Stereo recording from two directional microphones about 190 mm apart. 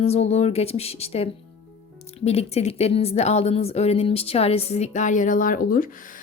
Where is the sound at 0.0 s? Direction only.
35° left (ahead or behind).